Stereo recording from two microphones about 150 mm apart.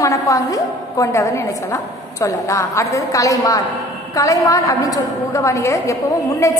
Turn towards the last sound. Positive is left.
turn(degrees=20)  # may be behind; listen again after turning